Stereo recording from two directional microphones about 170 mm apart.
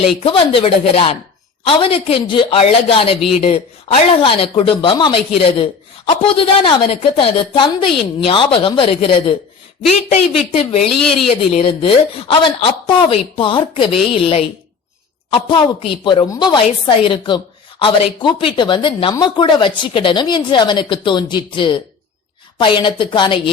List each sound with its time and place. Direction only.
0.2 s a woman's voice: 30° left (ahead or behind)